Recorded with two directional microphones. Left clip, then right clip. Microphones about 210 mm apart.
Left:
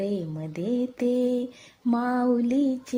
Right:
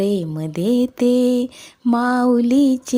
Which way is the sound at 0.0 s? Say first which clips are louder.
Right 9 dB; 30° right (ahead or behind).